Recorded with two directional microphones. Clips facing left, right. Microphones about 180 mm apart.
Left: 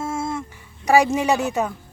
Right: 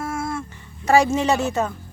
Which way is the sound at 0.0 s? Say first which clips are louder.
Left 1 dB; 25° left (ahead or behind).